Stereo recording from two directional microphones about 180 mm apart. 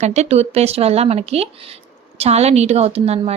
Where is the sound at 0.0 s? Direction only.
40° right (ahead or behind).